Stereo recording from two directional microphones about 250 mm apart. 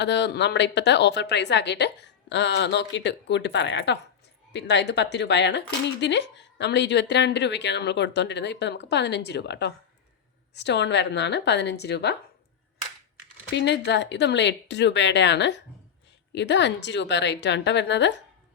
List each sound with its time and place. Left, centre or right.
0.0 s speech: left
13.5 s speech: left